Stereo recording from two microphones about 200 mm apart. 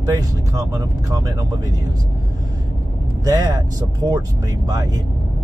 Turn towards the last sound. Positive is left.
turn(degrees=-20)  # may be behind; listen again after turning